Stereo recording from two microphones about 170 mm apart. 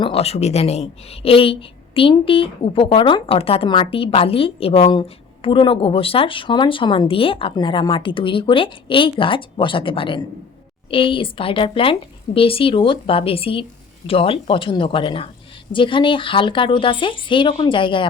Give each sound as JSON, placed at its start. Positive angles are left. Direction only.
{"t": 0.0, "sound": "speech", "side_deg": 35}